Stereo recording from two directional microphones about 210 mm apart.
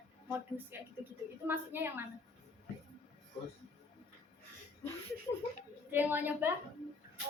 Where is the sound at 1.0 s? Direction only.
10° right (ahead or behind).